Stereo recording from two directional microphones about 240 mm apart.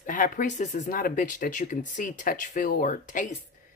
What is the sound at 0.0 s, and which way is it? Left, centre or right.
Speech, left.